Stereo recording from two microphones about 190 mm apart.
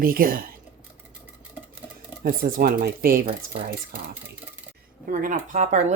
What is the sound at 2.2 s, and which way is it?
Speech, 50° right (ahead or behind).